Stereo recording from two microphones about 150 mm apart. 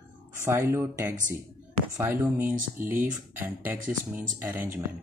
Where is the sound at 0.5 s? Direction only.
15° right (ahead or behind).